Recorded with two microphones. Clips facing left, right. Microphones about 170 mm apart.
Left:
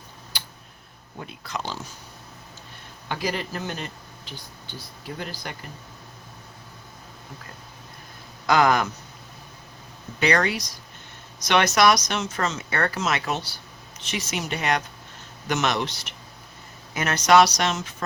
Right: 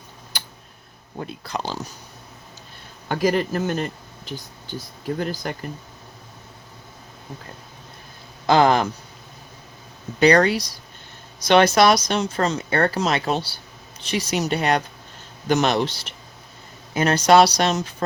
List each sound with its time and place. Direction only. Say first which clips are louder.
0.3 s tick: right 3 dB; 45° right (ahead or behind)
1.2 s speech: right 4 dB; 35° right (ahead or behind)
3.1 s speech: right 8 dB; 45° right (ahead or behind)
8.4 s speech: right 3 dB; 30° right (ahead or behind)
10.2 s speech: right 7 dB; 35° right (ahead or behind)